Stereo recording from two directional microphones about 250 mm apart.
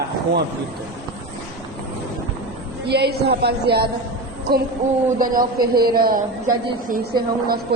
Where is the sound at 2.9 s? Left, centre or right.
Right.